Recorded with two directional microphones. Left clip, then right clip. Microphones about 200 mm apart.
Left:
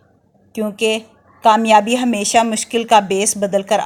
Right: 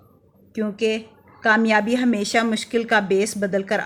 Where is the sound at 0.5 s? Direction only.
25° left (ahead or behind).